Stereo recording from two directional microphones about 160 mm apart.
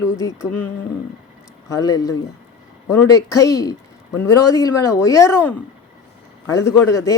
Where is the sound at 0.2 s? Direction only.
20° left (ahead or behind).